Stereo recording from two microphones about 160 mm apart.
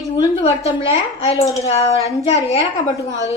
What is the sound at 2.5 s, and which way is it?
Speech, 45° left (ahead or behind).